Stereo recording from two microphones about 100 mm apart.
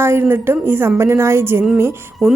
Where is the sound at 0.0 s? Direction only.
25° right (ahead or behind).